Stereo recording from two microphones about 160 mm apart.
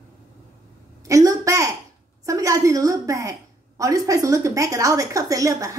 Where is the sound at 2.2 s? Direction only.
20° right (ahead or behind).